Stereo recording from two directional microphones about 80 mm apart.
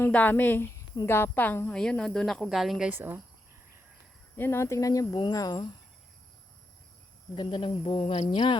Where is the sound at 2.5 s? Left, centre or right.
Centre.